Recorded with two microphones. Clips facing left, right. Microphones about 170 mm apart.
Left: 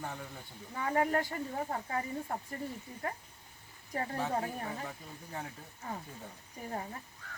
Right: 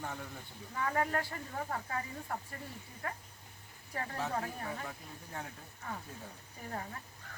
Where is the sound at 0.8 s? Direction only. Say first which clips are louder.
Left 3 dB; 25° left (ahead or behind).